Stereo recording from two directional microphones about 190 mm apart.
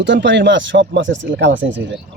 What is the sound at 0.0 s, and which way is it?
Speech, 70° right (ahead or behind).